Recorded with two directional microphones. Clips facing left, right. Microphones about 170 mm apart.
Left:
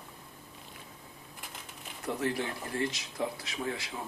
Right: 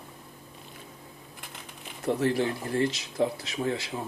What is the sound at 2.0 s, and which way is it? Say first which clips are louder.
Speech: right 7 dB; 30° right (ahead or behind).